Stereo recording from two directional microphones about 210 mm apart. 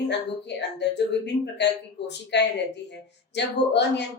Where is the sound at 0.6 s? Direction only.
55° left (ahead or behind).